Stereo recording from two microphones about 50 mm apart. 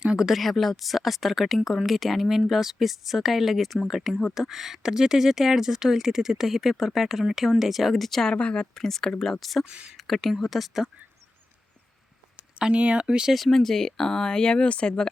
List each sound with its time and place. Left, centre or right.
0.0 s speech: centre
0.3 s speech: centre
8.2 s speech: left
8.7 s speech: centre
9.6 s speech: centre
10.0 s speech: centre
12.5 s speech: right
13.3 s speech: centre